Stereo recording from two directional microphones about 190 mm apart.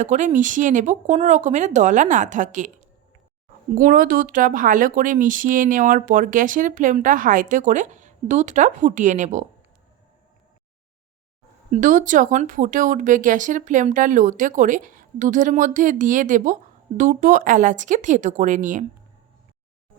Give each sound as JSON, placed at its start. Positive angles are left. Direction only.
{"t": 0.0, "sound": "speech", "side_deg": -40}
{"t": 3.8, "sound": "speech", "side_deg": -45}
{"t": 11.7, "sound": "speech", "side_deg": -45}